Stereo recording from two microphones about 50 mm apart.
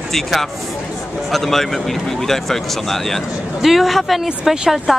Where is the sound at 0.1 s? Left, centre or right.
Centre.